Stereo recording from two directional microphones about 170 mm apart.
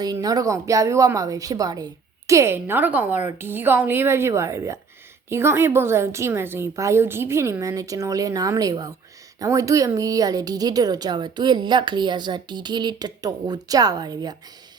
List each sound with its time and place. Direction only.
0.0 s a woman's voice: 25° right (ahead or behind)